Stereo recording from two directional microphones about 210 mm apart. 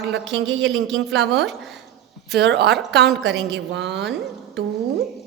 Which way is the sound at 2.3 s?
50° right (ahead or behind).